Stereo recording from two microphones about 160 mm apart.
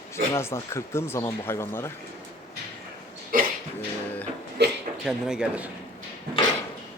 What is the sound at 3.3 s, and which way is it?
Dog, 60° right (ahead or behind).